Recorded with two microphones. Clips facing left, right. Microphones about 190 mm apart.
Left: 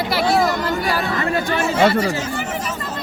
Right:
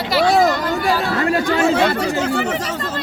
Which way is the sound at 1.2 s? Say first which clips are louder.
Right 4 dB; 65° right (ahead or behind).